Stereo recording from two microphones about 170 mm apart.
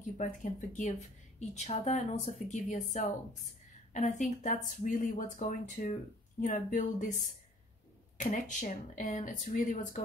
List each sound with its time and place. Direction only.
0.2 s speech: 45° left (ahead or behind)